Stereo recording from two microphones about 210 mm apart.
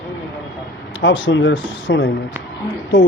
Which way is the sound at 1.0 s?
60° left (ahead or behind).